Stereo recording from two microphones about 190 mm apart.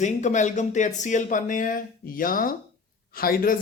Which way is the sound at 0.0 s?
40° left (ahead or behind).